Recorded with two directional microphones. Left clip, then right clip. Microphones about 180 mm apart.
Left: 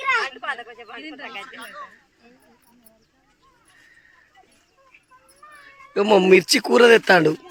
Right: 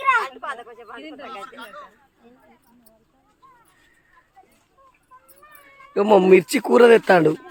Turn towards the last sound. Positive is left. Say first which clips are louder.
# even
turn(degrees=-5)  # may be behind; listen again after turning